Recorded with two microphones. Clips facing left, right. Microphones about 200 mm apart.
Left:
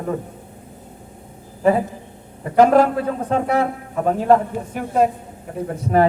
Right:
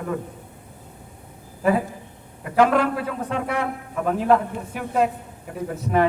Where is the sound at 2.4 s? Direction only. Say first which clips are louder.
Left 5 dB; 40° left (ahead or behind).